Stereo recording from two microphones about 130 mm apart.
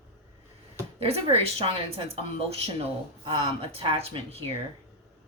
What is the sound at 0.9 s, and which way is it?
Speech, 50° right (ahead or behind).